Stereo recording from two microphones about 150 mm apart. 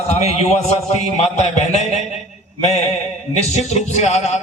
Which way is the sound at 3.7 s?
50° left (ahead or behind).